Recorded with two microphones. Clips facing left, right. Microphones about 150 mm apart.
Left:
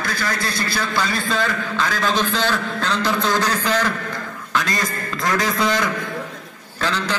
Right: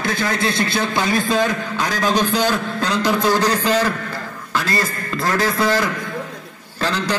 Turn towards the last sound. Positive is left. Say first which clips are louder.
# right 2 dB
turn(degrees=-10)  # may be behind; listen again after turning